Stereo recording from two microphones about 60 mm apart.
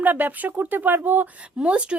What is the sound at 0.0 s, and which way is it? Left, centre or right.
Speech, right.